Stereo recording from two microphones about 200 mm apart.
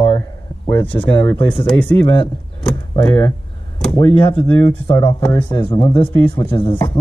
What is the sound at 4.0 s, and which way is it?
Speech, 25° left (ahead or behind).